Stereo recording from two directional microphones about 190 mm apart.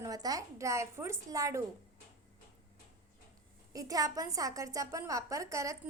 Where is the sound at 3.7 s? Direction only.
20° right (ahead or behind).